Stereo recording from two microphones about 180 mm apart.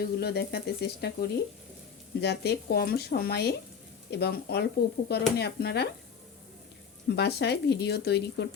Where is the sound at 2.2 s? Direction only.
65° left (ahead or behind).